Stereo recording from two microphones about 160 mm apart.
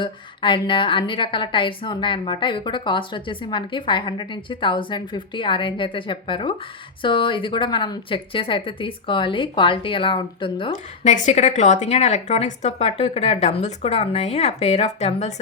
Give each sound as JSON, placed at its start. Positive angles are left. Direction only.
{"t": 0.0, "sound": "a woman's voice", "side_deg": 30}
{"t": 11.0, "sound": "a woman's voice", "side_deg": 50}